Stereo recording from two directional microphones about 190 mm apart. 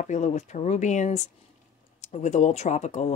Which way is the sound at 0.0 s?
40° left (ahead or behind).